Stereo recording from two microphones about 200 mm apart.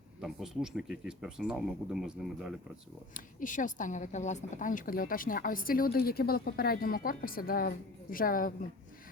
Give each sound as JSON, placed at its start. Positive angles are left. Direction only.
{"t": 0.2, "sound": "speech", "side_deg": 0}
{"t": 3.2, "sound": "a woman's voice", "side_deg": 40}